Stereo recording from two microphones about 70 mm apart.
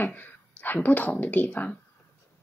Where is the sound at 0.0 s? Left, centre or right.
Left.